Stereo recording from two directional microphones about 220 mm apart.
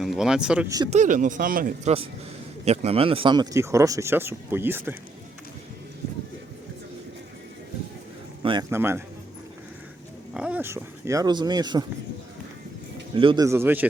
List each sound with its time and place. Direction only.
0.0 s speech: centre (ahead or behind)
0.9 s speech: 35° right (ahead or behind); by 4.9 s 10° right (ahead or behind)
8.4 s a man's voice: 20° right (ahead or behind)
10.3 s speech: 5° right (ahead or behind)
13.1 s speech: 20° right (ahead or behind)